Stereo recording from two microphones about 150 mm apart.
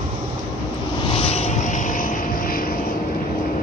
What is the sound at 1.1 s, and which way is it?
Vehicle, 45° left (ahead or behind).